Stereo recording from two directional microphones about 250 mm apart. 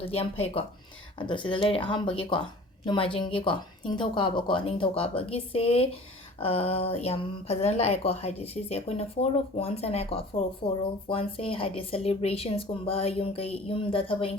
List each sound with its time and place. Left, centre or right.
0.0 s a woman's voice: left